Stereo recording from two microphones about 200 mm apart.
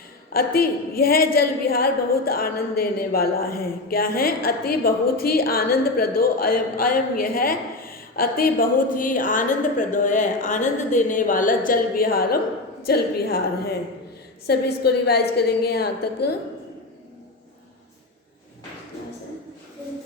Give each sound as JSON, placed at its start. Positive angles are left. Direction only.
{"t": 0.3, "sound": "a woman's voice", "side_deg": 50}
{"t": 14.4, "sound": "a woman's voice", "side_deg": 55}